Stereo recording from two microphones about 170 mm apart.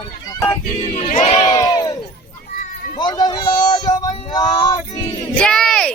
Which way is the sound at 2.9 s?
25° left (ahead or behind).